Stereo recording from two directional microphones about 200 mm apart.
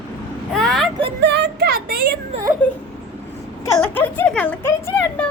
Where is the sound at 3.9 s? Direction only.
10° left (ahead or behind).